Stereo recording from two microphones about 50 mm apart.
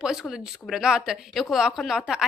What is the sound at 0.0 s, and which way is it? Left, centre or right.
A woman's voice, centre.